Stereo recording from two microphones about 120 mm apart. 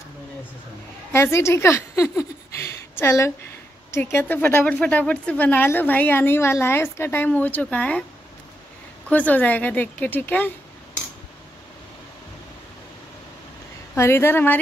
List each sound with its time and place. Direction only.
1.1 s a woman's voice: 20° left (ahead or behind)
9.1 s speech: 15° left (ahead or behind)
13.9 s speech: 20° left (ahead or behind)